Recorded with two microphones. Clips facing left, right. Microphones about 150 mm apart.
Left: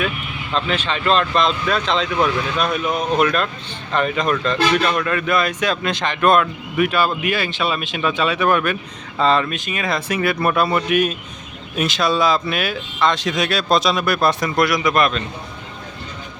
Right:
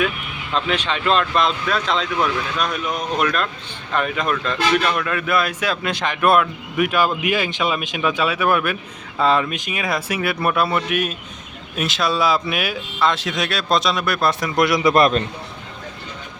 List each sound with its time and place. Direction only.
0.5 s a man's voice: 10° right (ahead or behind)
14.5 s speech: 25° right (ahead or behind)